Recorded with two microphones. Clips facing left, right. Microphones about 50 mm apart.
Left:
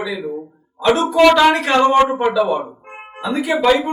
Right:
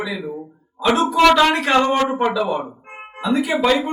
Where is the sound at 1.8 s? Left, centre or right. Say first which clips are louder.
Left 5 dB; left.